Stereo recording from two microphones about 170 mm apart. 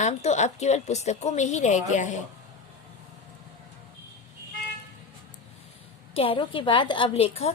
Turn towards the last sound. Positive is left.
turn(degrees=35)  # may be behind; listen again after turning